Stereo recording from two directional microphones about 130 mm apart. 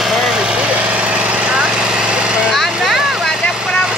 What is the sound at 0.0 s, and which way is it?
Vehicle, centre (ahead or behind).